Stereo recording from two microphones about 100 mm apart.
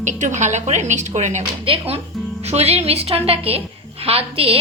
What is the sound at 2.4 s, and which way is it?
A woman's voice, 90° right.